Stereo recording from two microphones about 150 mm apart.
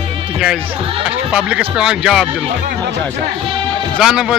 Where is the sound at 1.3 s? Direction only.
5° right (ahead or behind).